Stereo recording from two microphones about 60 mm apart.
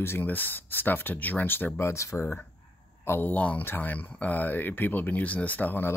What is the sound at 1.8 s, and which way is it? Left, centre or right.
Speech, left.